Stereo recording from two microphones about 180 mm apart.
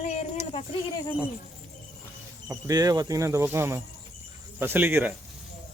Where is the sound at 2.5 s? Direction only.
20° right (ahead or behind).